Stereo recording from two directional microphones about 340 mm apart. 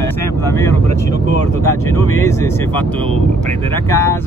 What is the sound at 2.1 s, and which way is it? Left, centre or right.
Speech, centre.